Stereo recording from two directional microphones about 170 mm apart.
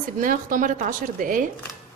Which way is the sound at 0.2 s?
55° right (ahead or behind).